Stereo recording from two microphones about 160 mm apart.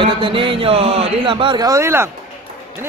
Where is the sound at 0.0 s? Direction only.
35° right (ahead or behind).